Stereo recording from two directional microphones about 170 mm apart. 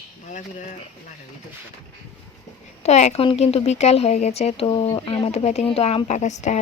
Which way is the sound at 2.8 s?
40° left (ahead or behind).